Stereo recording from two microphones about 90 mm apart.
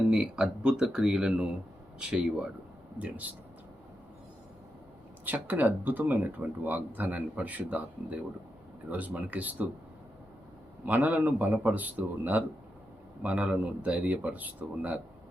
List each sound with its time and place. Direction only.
0.1 s speech: 5° right (ahead or behind)
5.2 s speech: 20° right (ahead or behind)
11.0 s speech: 20° right (ahead or behind)